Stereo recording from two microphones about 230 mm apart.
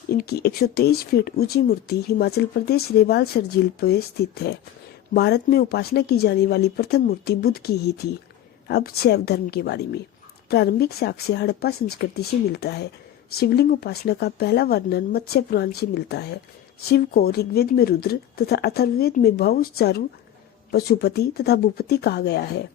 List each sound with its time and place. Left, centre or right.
0.1 s speech: left